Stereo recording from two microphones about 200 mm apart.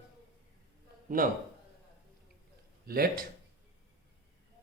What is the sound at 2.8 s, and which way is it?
Speech, 50° right (ahead or behind).